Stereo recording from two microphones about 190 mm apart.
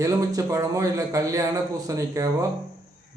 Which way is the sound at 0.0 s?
15° right (ahead or behind).